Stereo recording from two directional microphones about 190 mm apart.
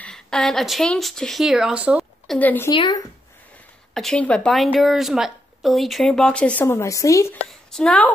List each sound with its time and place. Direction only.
0.0 s speech: 5° left (ahead or behind)
2.3 s speech: 10° left (ahead or behind)
2.7 s speech: 25° left (ahead or behind)
3.9 s speech: centre (ahead or behind)
7.4 s a woman's voice: 5° left (ahead or behind)